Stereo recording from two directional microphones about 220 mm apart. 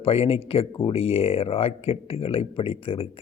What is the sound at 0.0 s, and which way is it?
Speech, 25° left (ahead or behind).